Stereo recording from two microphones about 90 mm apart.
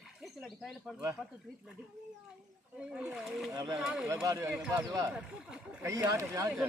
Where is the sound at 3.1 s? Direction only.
Centre (ahead or behind).